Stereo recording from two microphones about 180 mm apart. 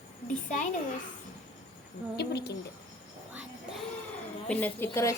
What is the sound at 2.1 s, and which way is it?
Speech, 65° left (ahead or behind).